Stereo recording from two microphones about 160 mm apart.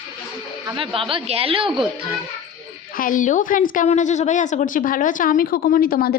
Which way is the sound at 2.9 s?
60° left (ahead or behind).